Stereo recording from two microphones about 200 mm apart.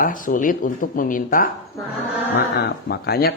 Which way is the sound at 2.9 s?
50° left (ahead or behind).